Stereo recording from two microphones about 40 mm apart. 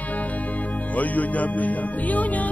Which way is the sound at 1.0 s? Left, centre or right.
Left.